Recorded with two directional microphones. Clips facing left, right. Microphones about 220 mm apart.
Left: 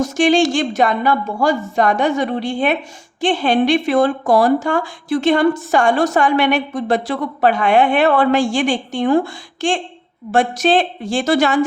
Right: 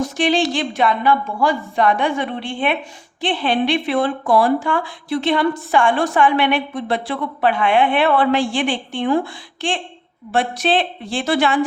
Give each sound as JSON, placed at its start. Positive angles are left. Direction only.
{"t": 0.0, "sound": "speech", "side_deg": 45}